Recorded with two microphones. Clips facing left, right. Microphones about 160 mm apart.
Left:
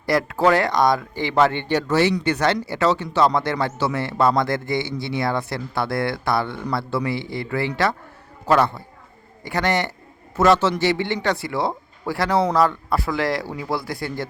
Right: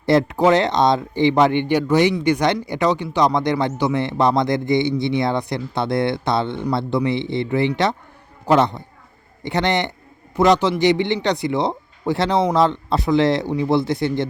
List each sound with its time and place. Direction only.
0.0 s speech: 25° right (ahead or behind)